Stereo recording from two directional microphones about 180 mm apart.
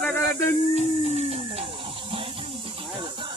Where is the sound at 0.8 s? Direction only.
35° right (ahead or behind).